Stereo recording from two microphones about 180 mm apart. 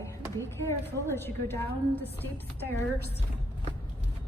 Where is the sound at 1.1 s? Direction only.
15° left (ahead or behind).